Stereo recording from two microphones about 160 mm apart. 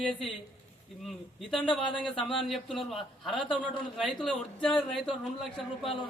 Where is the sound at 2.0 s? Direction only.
35° left (ahead or behind).